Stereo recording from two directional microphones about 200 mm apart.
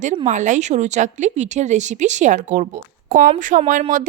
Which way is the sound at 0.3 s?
40° right (ahead or behind).